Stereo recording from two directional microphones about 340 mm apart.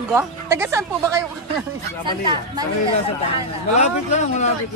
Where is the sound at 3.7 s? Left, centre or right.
Centre.